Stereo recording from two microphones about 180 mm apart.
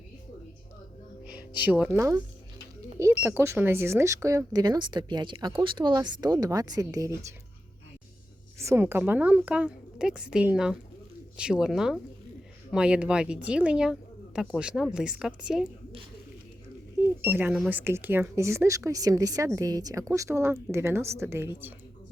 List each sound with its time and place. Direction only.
1.3 s speech: 10° right (ahead or behind)
8.6 s speech: 15° right (ahead or behind)
17.0 s speech: 10° right (ahead or behind)